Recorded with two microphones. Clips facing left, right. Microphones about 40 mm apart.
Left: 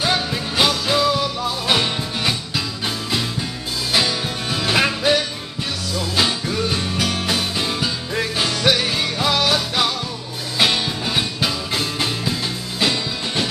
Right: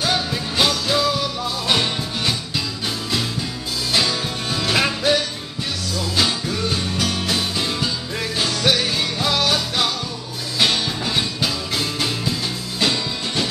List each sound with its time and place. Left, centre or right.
0.0 s music: centre
3.9 s music: centre